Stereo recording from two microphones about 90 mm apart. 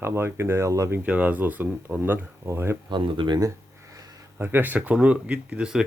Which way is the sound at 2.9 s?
60° right (ahead or behind).